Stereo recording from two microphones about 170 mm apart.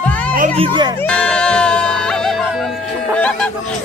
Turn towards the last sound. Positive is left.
turn(degrees=5)  # may be behind; listen again after turning